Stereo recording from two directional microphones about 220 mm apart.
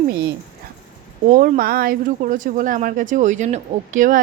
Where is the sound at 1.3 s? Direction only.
35° right (ahead or behind).